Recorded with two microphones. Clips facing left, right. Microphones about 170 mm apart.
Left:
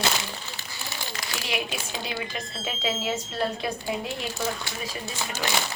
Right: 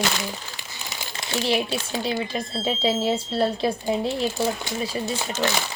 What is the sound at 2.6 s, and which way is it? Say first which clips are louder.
Speech: right 6 dB; 30° right (ahead or behind).